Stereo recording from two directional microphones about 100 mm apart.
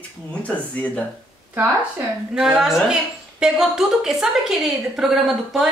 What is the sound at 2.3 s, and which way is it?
A woman's voice, 5° right (ahead or behind).